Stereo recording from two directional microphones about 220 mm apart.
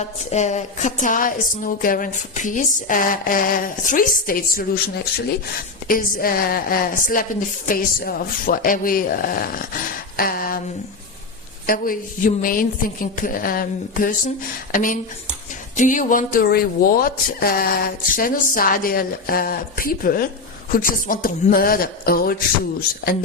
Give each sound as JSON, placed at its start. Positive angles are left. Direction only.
{"t": 0.0, "sound": "a woman's voice", "side_deg": 30}
{"t": 11.6, "sound": "a woman's voice", "side_deg": 40}